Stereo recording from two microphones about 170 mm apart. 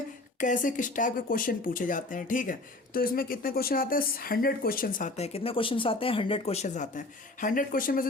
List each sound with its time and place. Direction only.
0.3 s speech: 50° left (ahead or behind)